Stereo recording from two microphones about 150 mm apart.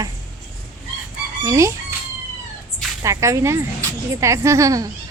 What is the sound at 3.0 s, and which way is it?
Speech, 20° right (ahead or behind).